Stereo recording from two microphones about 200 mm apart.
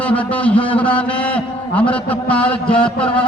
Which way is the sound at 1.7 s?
5° left (ahead or behind).